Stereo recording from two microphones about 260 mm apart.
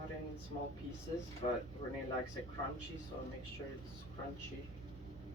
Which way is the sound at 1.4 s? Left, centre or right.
Left.